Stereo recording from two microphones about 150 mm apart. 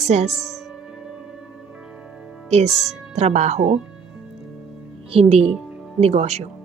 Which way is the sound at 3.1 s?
50° right (ahead or behind).